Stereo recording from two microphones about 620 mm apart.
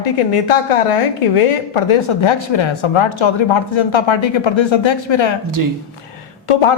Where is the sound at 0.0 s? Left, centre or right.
Left.